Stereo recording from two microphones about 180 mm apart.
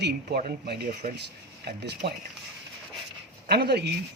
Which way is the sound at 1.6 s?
65° right (ahead or behind).